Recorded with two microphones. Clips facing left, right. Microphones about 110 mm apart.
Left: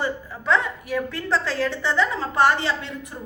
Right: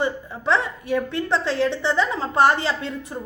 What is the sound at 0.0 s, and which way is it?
A woman's voice, 25° right (ahead or behind).